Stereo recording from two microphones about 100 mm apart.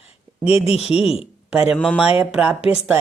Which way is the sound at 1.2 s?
10° right (ahead or behind).